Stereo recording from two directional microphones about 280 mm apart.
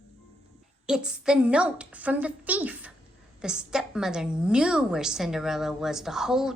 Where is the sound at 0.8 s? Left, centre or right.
Centre.